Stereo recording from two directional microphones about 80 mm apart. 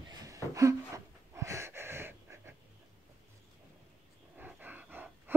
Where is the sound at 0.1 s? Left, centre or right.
Right.